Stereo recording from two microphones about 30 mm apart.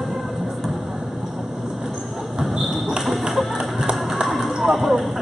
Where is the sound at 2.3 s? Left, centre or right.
Centre.